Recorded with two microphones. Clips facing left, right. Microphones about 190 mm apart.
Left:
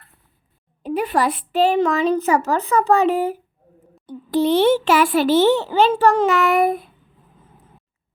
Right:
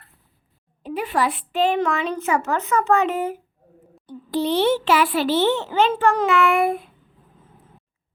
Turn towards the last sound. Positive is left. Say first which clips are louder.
# left 2 dB
turn(degrees=40)  # may be behind; listen again after turning